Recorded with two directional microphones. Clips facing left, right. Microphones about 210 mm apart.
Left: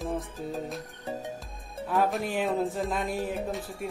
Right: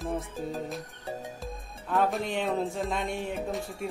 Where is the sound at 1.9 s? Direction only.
5° left (ahead or behind).